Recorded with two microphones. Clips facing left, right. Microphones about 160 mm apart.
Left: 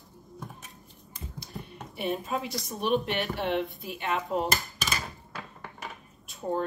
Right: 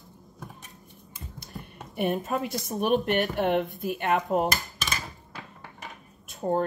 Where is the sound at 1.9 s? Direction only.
55° right (ahead or behind).